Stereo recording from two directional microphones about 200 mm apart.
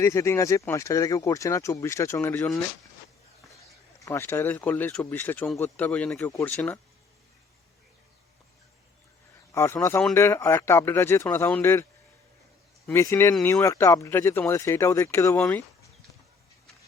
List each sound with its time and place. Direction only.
0.0 s speech: 15° left (ahead or behind)
4.0 s speech: 15° left (ahead or behind)
9.6 s speech: 10° left (ahead or behind)
12.9 s speech: 15° left (ahead or behind)